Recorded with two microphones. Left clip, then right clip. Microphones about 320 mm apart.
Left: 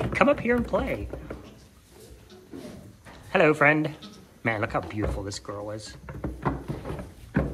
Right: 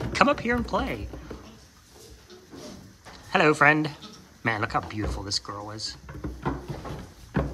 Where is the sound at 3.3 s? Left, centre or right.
Centre.